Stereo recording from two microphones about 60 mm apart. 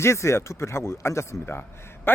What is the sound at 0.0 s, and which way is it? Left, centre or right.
Speech, left.